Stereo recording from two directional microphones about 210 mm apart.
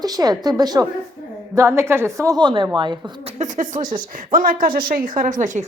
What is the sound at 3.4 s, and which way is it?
A woman's voice, 35° right (ahead or behind).